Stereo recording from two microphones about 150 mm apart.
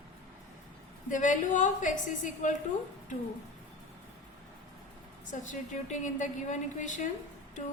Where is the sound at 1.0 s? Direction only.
60° left (ahead or behind).